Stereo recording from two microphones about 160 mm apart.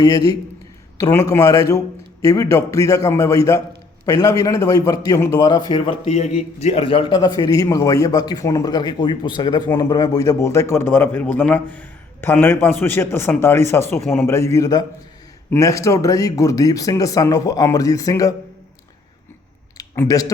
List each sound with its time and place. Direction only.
0.0 s a man's voice: 25° left (ahead or behind)
6.1 s a man's voice: 45° left (ahead or behind); by 18.3 s 20° left (ahead or behind)
19.7 s a sound: 20° left (ahead or behind)